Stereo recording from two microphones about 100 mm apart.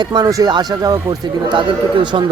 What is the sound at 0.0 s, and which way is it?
Speech, 45° right (ahead or behind).